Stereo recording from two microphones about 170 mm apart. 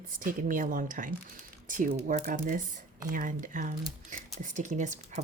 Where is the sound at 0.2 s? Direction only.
50° right (ahead or behind).